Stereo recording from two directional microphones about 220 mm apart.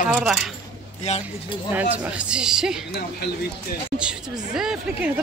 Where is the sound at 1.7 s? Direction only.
5° right (ahead or behind).